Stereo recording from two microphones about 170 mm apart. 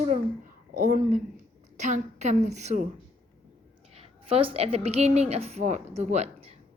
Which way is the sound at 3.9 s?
35° right (ahead or behind).